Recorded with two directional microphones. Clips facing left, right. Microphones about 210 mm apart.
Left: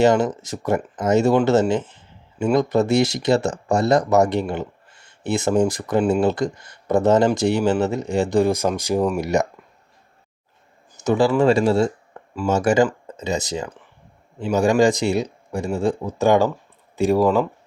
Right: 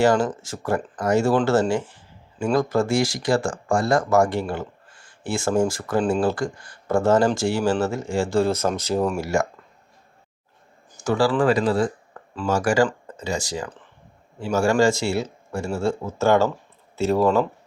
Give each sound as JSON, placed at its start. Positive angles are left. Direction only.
{"t": 0.0, "sound": "speech", "side_deg": 20}
{"t": 10.9, "sound": "speech", "side_deg": 20}
{"t": 12.1, "sound": "a sound", "side_deg": 25}
{"t": 12.5, "sound": "speech", "side_deg": 20}